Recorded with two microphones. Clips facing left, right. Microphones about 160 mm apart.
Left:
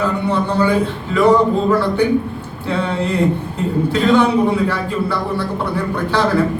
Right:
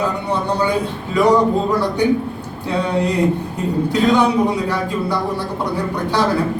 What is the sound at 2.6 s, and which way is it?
Speech, 15° right (ahead or behind).